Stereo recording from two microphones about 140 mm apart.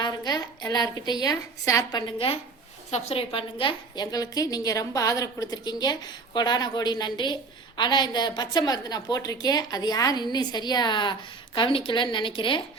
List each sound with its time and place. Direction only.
0.0 s a woman's voice: 30° left (ahead or behind)